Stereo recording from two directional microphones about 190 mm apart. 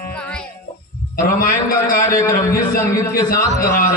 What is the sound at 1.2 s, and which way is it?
A man's voice, 50° left (ahead or behind).